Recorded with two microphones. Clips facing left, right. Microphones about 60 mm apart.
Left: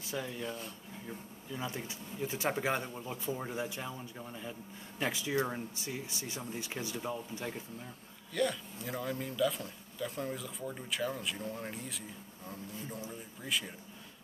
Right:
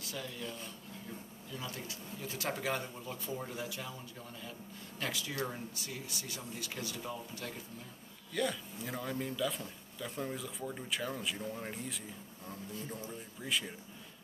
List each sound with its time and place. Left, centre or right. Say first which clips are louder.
0.0 s speech: left 4 dB; left
8.3 s speech: left 2 dB; centre
13.4 s speech: even; centre